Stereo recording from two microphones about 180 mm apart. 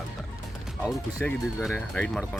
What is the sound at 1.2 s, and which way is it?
Speech, 10° left (ahead or behind).